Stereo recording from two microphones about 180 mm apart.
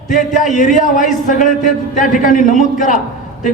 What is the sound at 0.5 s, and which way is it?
A man's voice, 45° left (ahead or behind).